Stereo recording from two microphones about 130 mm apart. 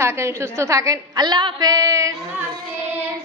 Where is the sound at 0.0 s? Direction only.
20° right (ahead or behind).